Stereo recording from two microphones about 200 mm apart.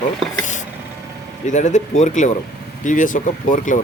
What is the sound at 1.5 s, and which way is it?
Speech, 35° left (ahead or behind).